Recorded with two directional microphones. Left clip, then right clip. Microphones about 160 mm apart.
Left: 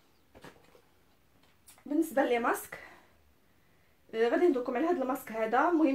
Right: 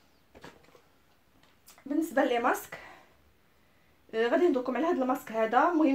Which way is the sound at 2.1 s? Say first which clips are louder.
Right 3 dB; 30° right (ahead or behind).